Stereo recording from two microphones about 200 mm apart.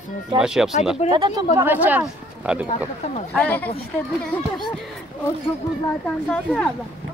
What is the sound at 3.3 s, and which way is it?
Speech, 10° left (ahead or behind).